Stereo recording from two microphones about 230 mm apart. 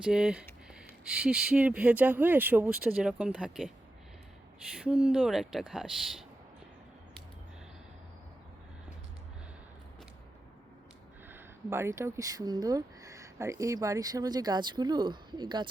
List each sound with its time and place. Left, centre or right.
0.0 s speech: centre
4.8 s speech: centre
11.3 s speech: centre